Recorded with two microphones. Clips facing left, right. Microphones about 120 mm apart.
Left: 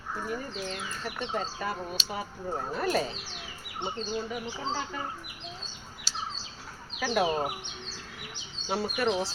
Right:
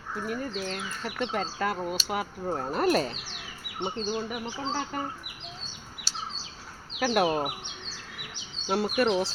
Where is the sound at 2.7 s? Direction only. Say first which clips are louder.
Right 4 dB; 65° right (ahead or behind).